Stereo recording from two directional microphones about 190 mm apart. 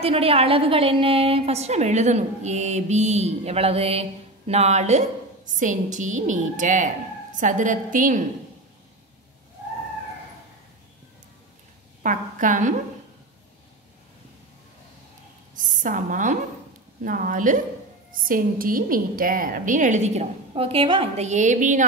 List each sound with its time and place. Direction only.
0.0 s a woman's voice: 30° right (ahead or behind)
12.0 s a woman's voice: 40° right (ahead or behind)
15.5 s a sound: 45° right (ahead or behind)
17.0 s a woman's voice: 45° right (ahead or behind)